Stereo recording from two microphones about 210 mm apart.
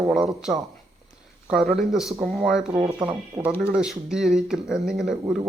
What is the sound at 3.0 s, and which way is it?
Speech, 20° right (ahead or behind).